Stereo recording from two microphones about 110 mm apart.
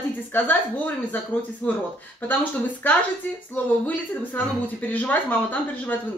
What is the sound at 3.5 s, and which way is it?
Speech, 15° left (ahead or behind).